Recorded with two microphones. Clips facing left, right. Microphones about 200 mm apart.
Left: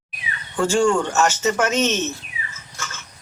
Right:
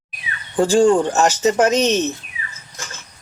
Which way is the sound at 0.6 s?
35° right (ahead or behind).